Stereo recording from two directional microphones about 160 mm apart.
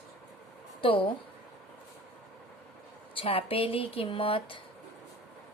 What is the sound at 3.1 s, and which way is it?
Speech, 35° left (ahead or behind).